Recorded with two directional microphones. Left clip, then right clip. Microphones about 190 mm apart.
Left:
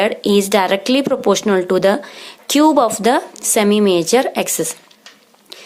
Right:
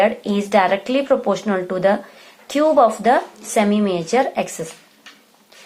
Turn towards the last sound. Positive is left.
turn(degrees=45)  # may be behind; listen again after turning